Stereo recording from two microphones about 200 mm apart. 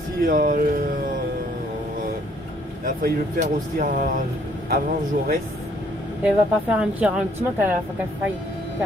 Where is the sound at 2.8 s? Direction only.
40° right (ahead or behind).